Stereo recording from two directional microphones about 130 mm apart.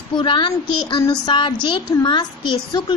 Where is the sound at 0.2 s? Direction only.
40° left (ahead or behind).